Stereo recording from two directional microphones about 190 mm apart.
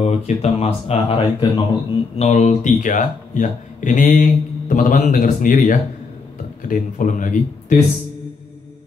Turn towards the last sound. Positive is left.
turn(degrees=45)  # may be behind; listen again after turning